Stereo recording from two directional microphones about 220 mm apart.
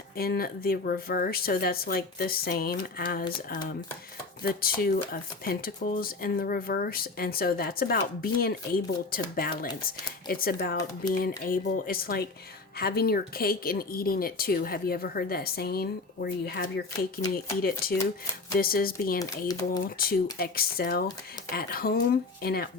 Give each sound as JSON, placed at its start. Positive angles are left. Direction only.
{"t": 0.2, "sound": "speech", "side_deg": 45}
{"t": 4.4, "sound": "speech", "side_deg": 40}
{"t": 19.5, "sound": "speech", "side_deg": 15}
{"t": 19.8, "sound": "speech", "side_deg": 40}